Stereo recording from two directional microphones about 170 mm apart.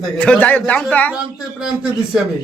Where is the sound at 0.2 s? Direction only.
10° left (ahead or behind).